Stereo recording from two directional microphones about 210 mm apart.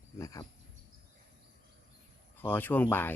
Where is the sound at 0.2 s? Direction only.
15° left (ahead or behind).